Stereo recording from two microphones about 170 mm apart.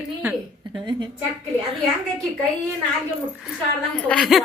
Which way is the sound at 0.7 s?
25° right (ahead or behind).